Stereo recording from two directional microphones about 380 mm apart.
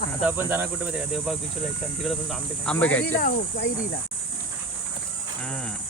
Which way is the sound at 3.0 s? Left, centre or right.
Left.